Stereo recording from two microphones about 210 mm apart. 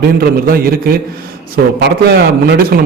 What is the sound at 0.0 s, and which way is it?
A man's voice, 45° right (ahead or behind).